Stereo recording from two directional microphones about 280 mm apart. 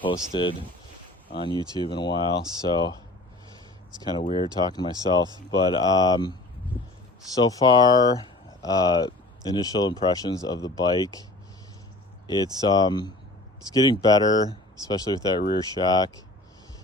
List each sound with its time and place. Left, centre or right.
0.0 s speech: centre
4.2 s speech: centre
7.3 s speech: centre
12.3 s speech: centre